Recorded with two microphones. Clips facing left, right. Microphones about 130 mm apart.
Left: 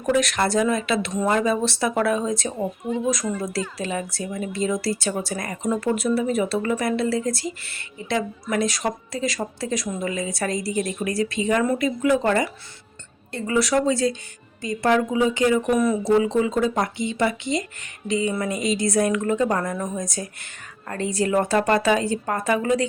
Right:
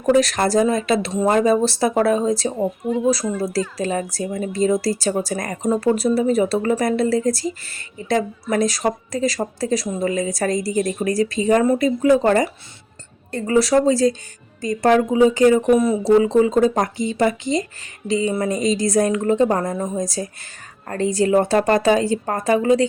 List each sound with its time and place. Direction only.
0.0 s speech: 35° right (ahead or behind)
3.8 s speech: 40° right (ahead or behind)
15.7 s a woman's voice: 25° right (ahead or behind)
20.1 s speech: 35° right (ahead or behind)